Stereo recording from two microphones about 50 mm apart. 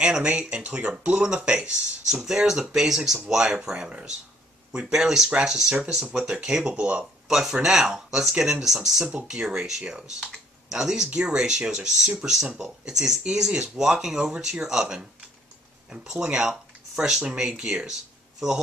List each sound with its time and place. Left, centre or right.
0.0 s speech: right
2.2 s speech: centre
7.2 s speech: centre